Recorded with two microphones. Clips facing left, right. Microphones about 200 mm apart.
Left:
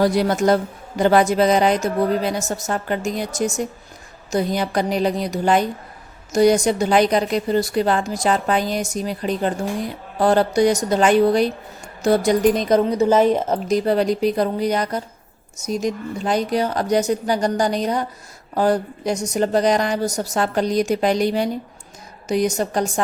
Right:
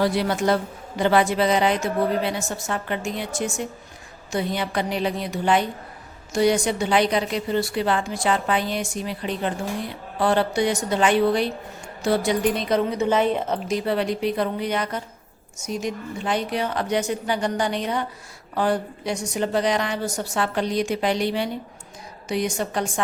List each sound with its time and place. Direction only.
0.0 s a woman's voice: 40° left (ahead or behind)